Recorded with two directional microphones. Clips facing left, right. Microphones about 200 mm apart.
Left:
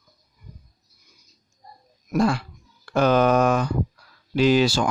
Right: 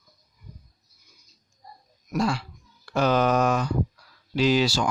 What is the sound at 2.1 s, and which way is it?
Speech, 55° left (ahead or behind).